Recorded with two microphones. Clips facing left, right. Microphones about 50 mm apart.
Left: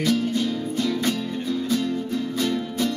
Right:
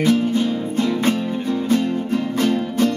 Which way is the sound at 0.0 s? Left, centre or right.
Right.